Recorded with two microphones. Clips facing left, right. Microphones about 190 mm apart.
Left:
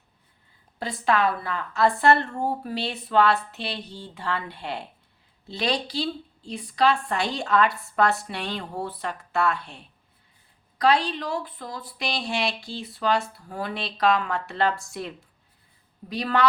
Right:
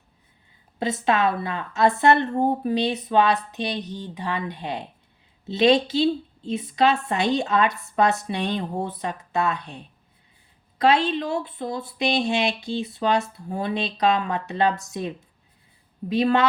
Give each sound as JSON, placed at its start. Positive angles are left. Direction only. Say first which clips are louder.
{"t": 0.8, "sound": "speech", "louder": "right 2 dB", "side_deg": -20}